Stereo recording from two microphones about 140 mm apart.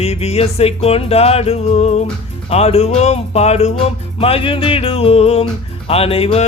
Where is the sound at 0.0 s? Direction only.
50° left (ahead or behind).